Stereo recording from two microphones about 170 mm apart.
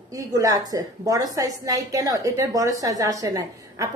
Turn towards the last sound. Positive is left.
turn(degrees=-20)  # may be behind; listen again after turning